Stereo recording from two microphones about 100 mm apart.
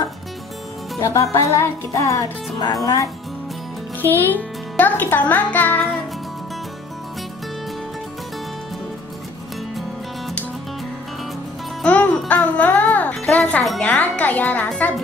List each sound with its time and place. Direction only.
0.9 s speech: 30° left (ahead or behind)
4.0 s speech: 20° left (ahead or behind)
11.8 s music: 15° left (ahead or behind)
13.1 s speech: 10° left (ahead or behind)